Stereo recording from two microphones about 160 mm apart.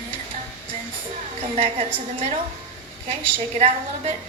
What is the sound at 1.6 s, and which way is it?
Speech, 35° right (ahead or behind).